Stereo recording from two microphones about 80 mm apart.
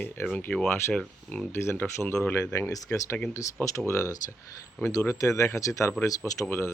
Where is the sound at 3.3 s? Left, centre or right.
Left.